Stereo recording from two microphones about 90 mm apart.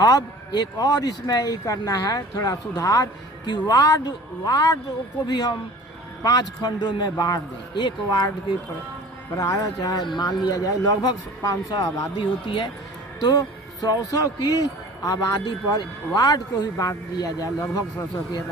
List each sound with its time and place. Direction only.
0.0 s speech: 45° left (ahead or behind)
9.3 s speech: 40° left (ahead or behind)
11.7 s speech: 50° left (ahead or behind)
13.8 s speech: 45° left (ahead or behind)